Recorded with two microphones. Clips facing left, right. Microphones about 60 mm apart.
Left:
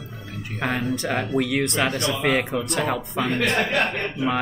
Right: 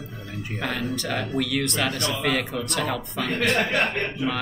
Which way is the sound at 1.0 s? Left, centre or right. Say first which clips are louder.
Left 3 dB; centre.